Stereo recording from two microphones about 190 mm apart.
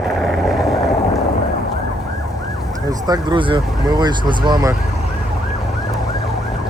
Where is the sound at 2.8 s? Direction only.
20° right (ahead or behind).